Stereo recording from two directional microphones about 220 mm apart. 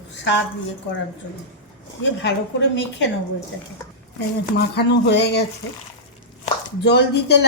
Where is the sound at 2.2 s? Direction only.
50° left (ahead or behind).